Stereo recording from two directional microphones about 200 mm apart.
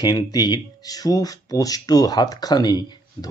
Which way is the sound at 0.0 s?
20° left (ahead or behind).